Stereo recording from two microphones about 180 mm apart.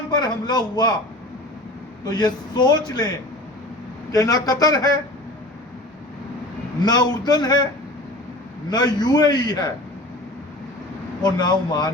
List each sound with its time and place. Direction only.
0.1 s speech: 25° left (ahead or behind)
2.0 s speech: 25° left (ahead or behind)
4.1 s speech: 20° left (ahead or behind)
6.8 s speech: 20° left (ahead or behind)
8.7 s speech: 20° left (ahead or behind)
11.2 s speech: 25° left (ahead or behind)